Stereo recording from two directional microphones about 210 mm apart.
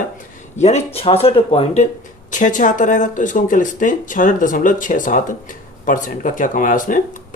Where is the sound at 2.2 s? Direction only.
35° left (ahead or behind).